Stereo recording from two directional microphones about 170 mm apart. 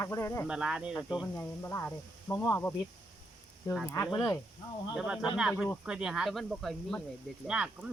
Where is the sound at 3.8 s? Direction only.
15° left (ahead or behind).